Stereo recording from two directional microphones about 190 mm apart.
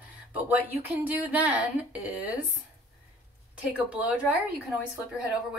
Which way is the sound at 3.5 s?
5° right (ahead or behind).